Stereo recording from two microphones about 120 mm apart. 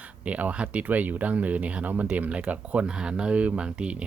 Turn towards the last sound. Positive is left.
turn(degrees=-10)  # may be behind; listen again after turning